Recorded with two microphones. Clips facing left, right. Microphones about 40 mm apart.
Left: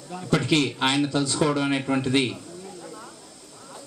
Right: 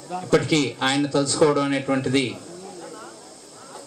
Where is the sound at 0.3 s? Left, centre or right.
Left.